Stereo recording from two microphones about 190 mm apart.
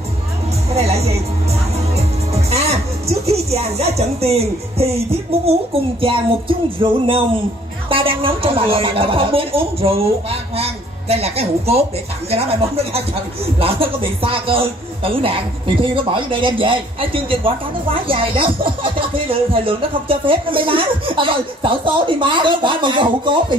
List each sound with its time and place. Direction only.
0.7 s music: 35° right (ahead or behind)
2.3 s music: 35° right (ahead or behind)
5.4 s speech: 30° right (ahead or behind)